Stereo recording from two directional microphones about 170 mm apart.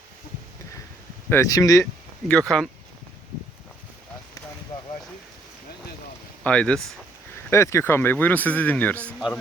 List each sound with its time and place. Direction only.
1.3 s speech: 20° left (ahead or behind)
2.2 s speech: 5° left (ahead or behind)
6.4 s speech: 5° left (ahead or behind)